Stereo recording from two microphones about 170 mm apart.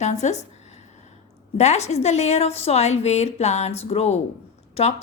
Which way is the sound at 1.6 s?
40° left (ahead or behind).